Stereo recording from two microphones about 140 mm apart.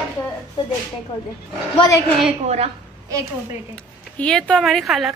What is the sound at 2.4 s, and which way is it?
Speech, 50° right (ahead or behind).